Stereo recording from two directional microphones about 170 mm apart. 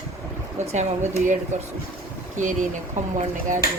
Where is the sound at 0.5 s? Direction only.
45° right (ahead or behind).